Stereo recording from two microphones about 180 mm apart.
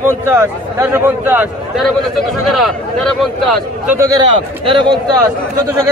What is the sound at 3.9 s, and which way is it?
Speech, 15° right (ahead or behind).